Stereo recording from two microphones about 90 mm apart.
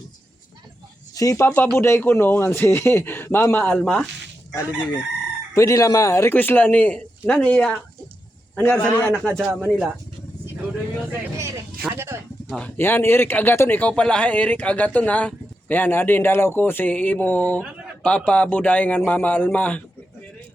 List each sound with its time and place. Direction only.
1.1 s speech: 40° left (ahead or behind)
1.5 s a man's voice: 15° left (ahead or behind)
1.7 s speech: 30° left (ahead or behind)
3.8 s a man's voice: 10° left (ahead or behind)
5.5 s speech: 40° left (ahead or behind)
6.3 s a man's voice: 20° left (ahead or behind)
9.5 s speech: 20° right (ahead or behind)
11.1 s vehicle: 30° right (ahead or behind)
11.8 s a sound: 25° right (ahead or behind)
12.5 s a man's voice: 20° left (ahead or behind)